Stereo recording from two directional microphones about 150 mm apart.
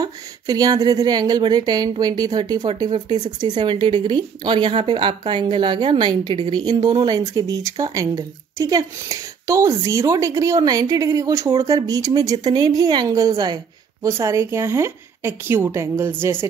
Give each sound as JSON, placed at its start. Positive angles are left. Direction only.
{"t": 0.0, "sound": "a woman's voice", "side_deg": -25}